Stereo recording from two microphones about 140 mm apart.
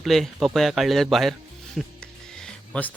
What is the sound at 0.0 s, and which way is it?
Speech, centre (ahead or behind).